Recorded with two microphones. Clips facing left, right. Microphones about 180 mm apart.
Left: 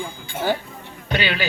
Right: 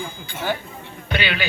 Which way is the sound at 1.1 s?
40° left (ahead or behind).